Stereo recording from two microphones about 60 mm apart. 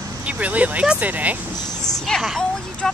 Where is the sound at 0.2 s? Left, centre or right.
Right.